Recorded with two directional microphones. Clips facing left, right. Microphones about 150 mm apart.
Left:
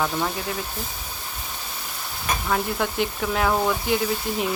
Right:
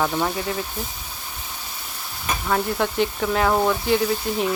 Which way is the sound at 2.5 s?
Centre (ahead or behind).